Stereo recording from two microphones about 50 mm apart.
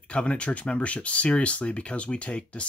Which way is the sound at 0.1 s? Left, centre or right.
Left.